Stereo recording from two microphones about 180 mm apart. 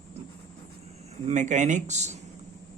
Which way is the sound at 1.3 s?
40° right (ahead or behind).